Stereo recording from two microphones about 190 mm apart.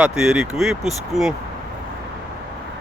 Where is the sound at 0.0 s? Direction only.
5° right (ahead or behind).